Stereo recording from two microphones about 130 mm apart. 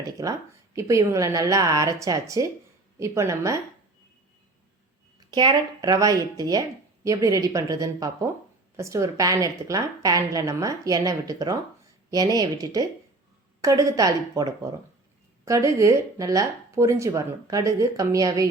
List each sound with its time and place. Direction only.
0.0 s speech: 25° right (ahead or behind)
5.3 s speech: 35° right (ahead or behind)